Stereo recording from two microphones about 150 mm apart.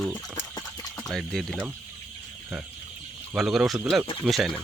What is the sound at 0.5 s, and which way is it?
Clip-clop, 25° left (ahead or behind).